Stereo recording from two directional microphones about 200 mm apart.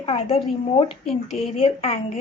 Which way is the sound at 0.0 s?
30° left (ahead or behind).